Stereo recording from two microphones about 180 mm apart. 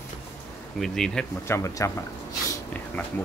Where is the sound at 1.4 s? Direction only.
15° left (ahead or behind).